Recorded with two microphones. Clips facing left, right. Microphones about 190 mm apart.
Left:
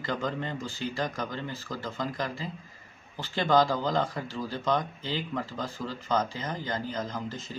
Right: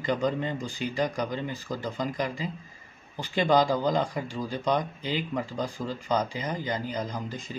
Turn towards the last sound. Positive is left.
turn(degrees=-15)  # may be behind; listen again after turning